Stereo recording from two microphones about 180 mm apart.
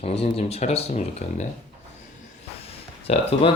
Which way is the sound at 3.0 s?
35° left (ahead or behind).